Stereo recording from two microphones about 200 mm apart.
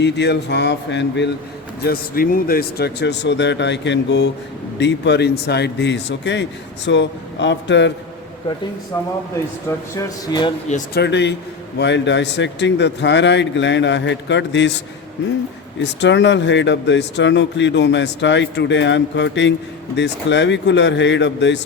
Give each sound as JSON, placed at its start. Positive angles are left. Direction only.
{"t": 0.0, "sound": "speech", "side_deg": 60}
{"t": 1.8, "sound": "speech", "side_deg": 50}
{"t": 10.9, "sound": "speech", "side_deg": 60}
{"t": 15.8, "sound": "speech", "side_deg": 60}